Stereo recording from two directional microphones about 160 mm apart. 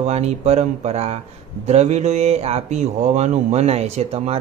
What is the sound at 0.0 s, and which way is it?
Speech, 40° right (ahead or behind).